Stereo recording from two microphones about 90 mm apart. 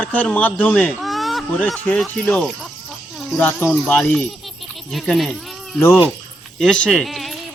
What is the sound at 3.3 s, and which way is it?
Speech, 15° left (ahead or behind).